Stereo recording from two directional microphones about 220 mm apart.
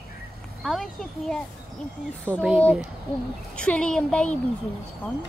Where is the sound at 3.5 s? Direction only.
5° left (ahead or behind).